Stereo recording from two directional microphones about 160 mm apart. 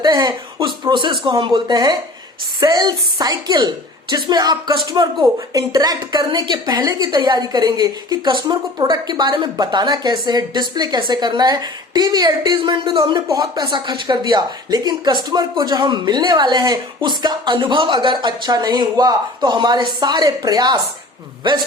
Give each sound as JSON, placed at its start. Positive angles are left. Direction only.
{"t": 0.0, "sound": "a woman's voice", "side_deg": -25}